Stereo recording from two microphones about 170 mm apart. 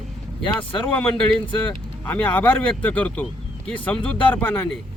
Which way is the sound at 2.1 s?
10° left (ahead or behind).